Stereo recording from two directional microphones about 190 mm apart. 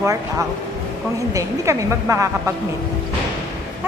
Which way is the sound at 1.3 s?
15° right (ahead or behind).